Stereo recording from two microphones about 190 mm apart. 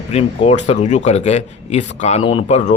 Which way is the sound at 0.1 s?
35° left (ahead or behind).